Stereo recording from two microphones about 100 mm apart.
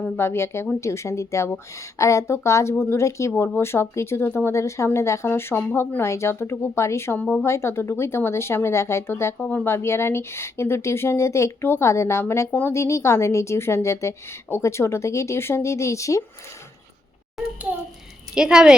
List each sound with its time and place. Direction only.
0.0 s speech: 25° left (ahead or behind)
7.2 s speech: 10° left (ahead or behind)
7.4 s speech: 25° left (ahead or behind)
12.5 s speech: 15° left (ahead or behind)
12.7 s speech: 30° left (ahead or behind)
18.3 s speech: 5° right (ahead or behind)